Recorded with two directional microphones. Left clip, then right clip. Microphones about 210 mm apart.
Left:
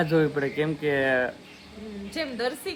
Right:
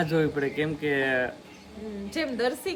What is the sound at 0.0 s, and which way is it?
Speech, centre (ahead or behind).